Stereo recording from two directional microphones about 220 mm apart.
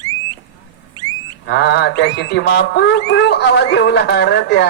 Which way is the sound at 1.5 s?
50° left (ahead or behind).